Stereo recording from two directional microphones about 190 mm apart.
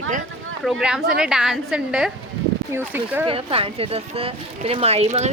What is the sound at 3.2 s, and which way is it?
Speech, 30° right (ahead or behind).